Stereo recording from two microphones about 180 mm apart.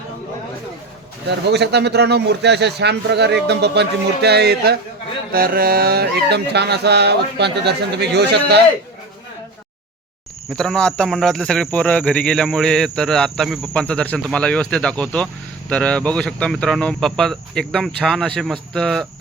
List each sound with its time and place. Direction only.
1.3 s a man's voice: 70° right (ahead or behind)
10.6 s speech: 5° left (ahead or behind)